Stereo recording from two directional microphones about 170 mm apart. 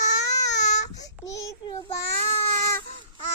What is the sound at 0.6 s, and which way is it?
Speech, 45° left (ahead or behind).